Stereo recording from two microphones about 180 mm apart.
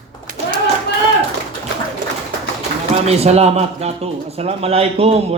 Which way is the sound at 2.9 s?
35° right (ahead or behind).